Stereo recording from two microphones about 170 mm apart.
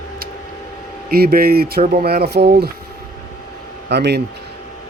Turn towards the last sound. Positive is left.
turn(degrees=-80)